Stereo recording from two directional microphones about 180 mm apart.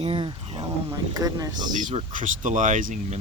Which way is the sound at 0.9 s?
20° right (ahead or behind).